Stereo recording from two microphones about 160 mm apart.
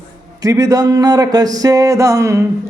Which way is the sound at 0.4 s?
20° right (ahead or behind).